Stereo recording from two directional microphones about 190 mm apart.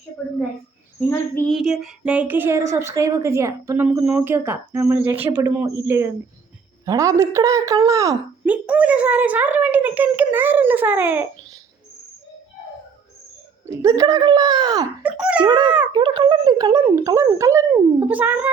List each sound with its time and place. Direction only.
1.1 s a child's voice: 10° left (ahead or behind)
1.5 s speech: centre (ahead or behind); by 5.7 s 15° right (ahead or behind)
6.8 s speech: 15° right (ahead or behind)
8.6 s speech: 5° right (ahead or behind)
13.7 s speech: 20° right (ahead or behind)
15.0 s speech: 5° right (ahead or behind)
15.4 s speech: 25° right (ahead or behind)